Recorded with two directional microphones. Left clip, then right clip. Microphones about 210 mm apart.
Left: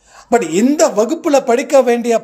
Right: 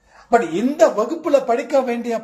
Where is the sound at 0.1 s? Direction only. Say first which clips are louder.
Left 3 dB; 50° left (ahead or behind).